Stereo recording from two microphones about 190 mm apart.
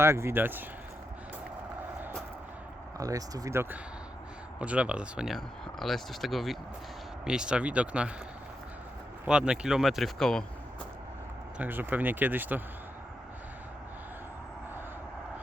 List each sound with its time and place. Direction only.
0.0 s speech: 15° right (ahead or behind)
3.0 s speech: 20° right (ahead or behind)
9.2 s speech: 5° right (ahead or behind)
11.5 s speech: 10° right (ahead or behind)